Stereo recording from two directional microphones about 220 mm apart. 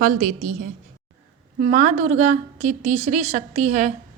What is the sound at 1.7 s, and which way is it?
A woman's voice, 35° right (ahead or behind).